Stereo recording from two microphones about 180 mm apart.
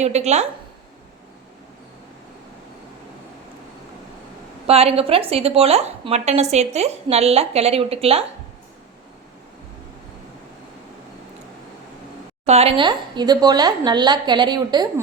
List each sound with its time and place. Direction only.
0.0 s a woman's voice: 40° right (ahead or behind)
4.6 s a woman's voice: 35° right (ahead or behind)
12.5 s a woman's voice: 35° right (ahead or behind)